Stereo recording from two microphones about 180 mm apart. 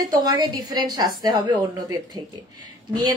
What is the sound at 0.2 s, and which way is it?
A woman's voice, 20° right (ahead or behind).